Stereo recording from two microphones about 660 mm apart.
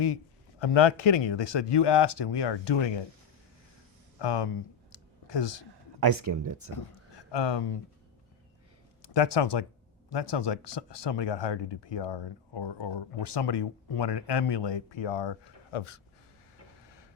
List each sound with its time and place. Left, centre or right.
0.6 s speech: left
4.2 s a sound: left
6.0 s speech: right
6.7 s speech: left
9.0 s speech: left